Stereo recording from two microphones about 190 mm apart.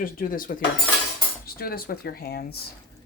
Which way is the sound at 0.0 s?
45° left (ahead or behind).